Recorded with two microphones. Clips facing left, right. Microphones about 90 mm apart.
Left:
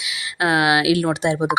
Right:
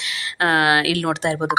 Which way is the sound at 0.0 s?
10° left (ahead or behind).